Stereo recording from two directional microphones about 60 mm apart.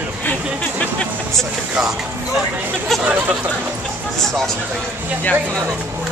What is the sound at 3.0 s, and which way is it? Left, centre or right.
Speech, right.